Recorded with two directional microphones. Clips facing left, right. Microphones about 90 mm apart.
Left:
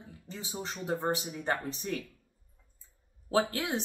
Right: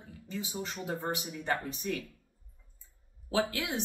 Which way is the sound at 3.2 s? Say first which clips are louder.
Left 2 dB; 35° left (ahead or behind).